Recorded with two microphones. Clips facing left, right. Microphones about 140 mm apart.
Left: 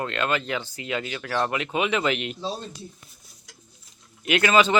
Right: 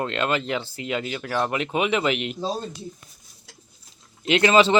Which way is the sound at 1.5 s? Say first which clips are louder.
Right 2 dB; 25° right (ahead or behind).